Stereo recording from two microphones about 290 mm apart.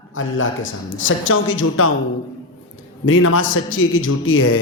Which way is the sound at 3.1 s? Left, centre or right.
Left.